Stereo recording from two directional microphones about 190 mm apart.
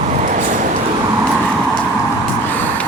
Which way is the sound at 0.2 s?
40° right (ahead or behind).